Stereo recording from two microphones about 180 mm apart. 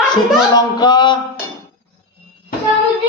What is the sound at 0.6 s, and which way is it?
Speech, 25° left (ahead or behind).